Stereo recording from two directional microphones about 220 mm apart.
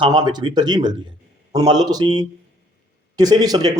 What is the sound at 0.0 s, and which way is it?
A man's voice, 20° right (ahead or behind).